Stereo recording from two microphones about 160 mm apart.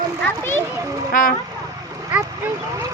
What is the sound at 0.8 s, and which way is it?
Speech, 20° right (ahead or behind).